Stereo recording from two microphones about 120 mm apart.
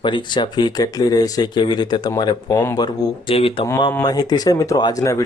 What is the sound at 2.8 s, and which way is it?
Speech, 50° left (ahead or behind).